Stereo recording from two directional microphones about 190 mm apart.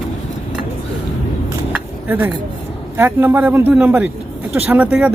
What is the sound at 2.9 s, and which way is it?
Speech, 10° right (ahead or behind).